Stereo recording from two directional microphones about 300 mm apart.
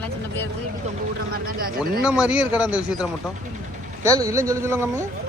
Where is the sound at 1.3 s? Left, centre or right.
Right.